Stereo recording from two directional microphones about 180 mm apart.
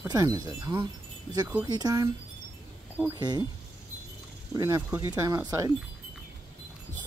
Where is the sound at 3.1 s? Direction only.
25° right (ahead or behind).